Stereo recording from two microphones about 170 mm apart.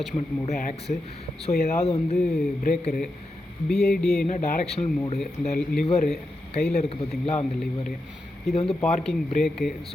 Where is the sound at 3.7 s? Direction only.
5° left (ahead or behind).